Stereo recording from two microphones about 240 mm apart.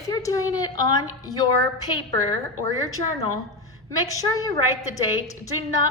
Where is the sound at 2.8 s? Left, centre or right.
Centre.